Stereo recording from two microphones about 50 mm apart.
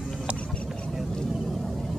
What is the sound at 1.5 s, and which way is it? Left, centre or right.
Vehicle, centre.